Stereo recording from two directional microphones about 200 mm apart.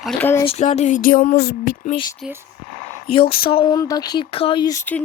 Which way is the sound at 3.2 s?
25° left (ahead or behind).